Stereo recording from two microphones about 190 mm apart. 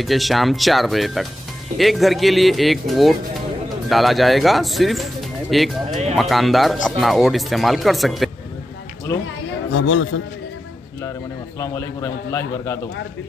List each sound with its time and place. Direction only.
0.0 s speech: centre (ahead or behind)
9.7 s speech: 90° left
11.6 s a man's voice: 15° left (ahead or behind)